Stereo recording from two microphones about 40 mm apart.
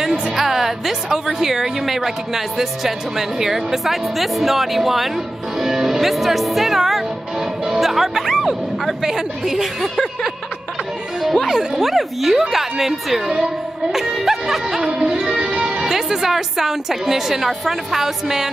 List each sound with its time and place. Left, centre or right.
0.0 s a woman's voice: centre
9.8 s speech: centre
11.4 s a woman's voice: centre
13.9 s music: centre
15.3 s music: right
15.7 s a woman's voice: centre